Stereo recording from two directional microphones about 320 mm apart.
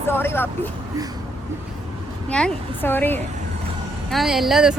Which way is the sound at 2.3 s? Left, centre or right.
Centre.